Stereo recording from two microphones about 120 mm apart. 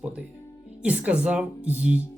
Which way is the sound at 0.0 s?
10° right (ahead or behind).